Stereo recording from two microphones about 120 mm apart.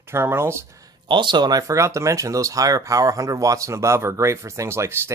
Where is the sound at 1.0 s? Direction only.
40° right (ahead or behind).